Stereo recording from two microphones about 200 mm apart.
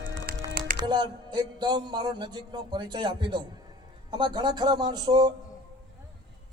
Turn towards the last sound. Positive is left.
turn(degrees=-20)  # may be behind; listen again after turning